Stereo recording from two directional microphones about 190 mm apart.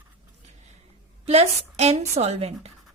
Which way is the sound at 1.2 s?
35° right (ahead or behind).